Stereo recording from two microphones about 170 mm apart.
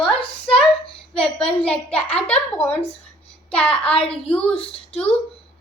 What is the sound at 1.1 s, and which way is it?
A child's voice, 5° left (ahead or behind).